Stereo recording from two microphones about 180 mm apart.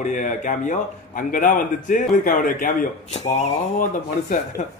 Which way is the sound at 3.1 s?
35° left (ahead or behind).